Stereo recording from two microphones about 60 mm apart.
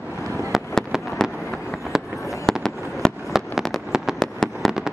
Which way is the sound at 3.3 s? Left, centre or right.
Centre.